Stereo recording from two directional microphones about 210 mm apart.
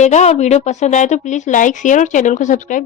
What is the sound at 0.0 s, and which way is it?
A woman's voice, 35° left (ahead or behind).